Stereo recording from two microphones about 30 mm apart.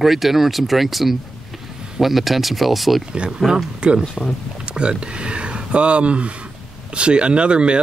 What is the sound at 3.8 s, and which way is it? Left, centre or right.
Speech, right.